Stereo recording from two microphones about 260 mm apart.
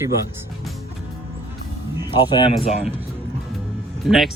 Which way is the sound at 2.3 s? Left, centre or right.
Centre.